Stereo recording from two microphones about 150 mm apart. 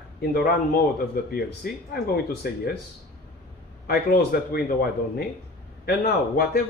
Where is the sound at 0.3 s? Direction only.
90° left.